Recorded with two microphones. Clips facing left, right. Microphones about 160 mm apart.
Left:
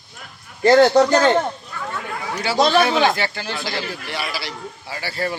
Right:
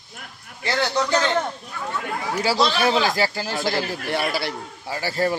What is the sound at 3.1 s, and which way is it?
A man's voice, 35° right (ahead or behind).